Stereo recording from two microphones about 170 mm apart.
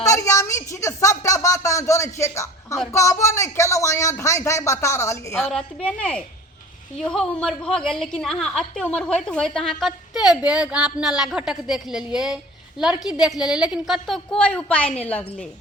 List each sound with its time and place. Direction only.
0.0 s a sound: 20° left (ahead or behind)
2.9 s speech: 15° left (ahead or behind)
5.4 s a woman's voice: 5° left (ahead or behind)